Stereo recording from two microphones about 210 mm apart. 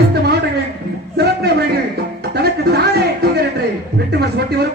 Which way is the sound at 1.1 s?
50° right (ahead or behind).